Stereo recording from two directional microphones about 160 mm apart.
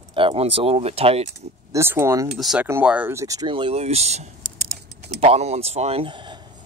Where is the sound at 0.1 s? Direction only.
35° right (ahead or behind).